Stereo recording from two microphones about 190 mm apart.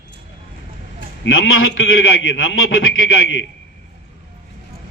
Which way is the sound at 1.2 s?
85° left.